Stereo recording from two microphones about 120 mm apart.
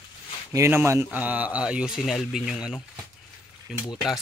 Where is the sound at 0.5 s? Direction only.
25° right (ahead or behind); by 3.8 s centre (ahead or behind).